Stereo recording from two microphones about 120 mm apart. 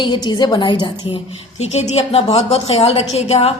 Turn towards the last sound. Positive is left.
turn(degrees=60)  # may be behind; listen again after turning